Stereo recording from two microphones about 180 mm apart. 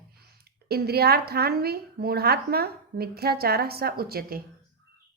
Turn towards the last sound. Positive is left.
turn(degrees=-55)  # may be behind; listen again after turning